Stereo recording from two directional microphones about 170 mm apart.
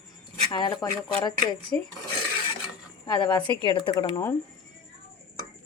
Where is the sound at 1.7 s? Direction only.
10° left (ahead or behind).